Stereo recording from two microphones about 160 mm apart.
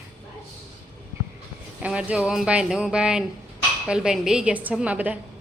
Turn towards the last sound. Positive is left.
turn(degrees=-10)  # may be behind; listen again after turning